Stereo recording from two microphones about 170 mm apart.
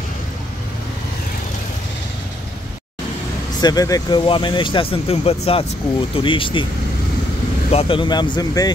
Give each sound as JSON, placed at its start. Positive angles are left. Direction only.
{"t": 3.6, "sound": "speech", "side_deg": 20}
{"t": 7.7, "sound": "speech", "side_deg": 30}